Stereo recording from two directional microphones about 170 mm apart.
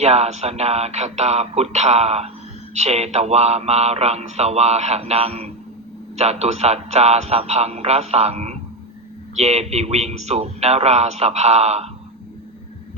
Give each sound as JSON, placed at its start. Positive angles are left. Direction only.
{"t": 0.0, "sound": "music", "side_deg": -40}